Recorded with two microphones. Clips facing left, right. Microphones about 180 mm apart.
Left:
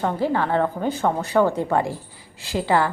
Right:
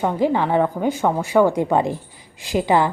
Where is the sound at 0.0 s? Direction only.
15° right (ahead or behind).